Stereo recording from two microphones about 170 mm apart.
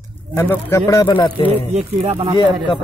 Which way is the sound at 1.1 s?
30° left (ahead or behind).